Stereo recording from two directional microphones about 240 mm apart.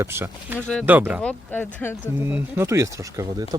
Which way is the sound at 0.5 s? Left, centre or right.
Centre.